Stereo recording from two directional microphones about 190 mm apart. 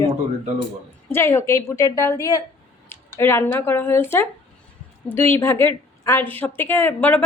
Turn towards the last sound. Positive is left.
turn(degrees=10)  # may be behind; listen again after turning